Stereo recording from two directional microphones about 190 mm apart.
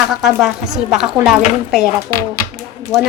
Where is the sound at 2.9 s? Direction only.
15° right (ahead or behind).